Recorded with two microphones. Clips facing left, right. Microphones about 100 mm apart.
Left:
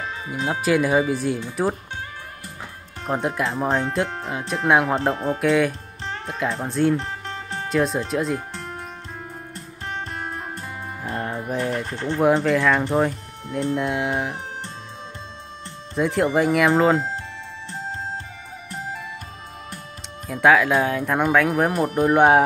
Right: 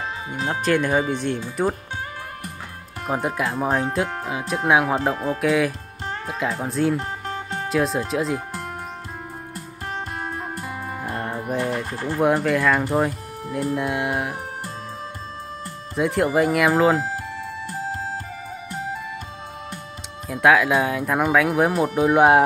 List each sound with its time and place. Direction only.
0.5 s speech: 5° left (ahead or behind)
3.1 s speech: centre (ahead or behind)
7.0 s music: 35° right (ahead or behind)
7.7 s speech: centre (ahead or behind)
11.0 s music: centre (ahead or behind)
12.3 s speech: centre (ahead or behind)
15.9 s speech: centre (ahead or behind)
20.2 s speech: centre (ahead or behind)